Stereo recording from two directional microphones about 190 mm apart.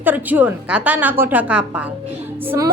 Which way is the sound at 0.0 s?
10° right (ahead or behind).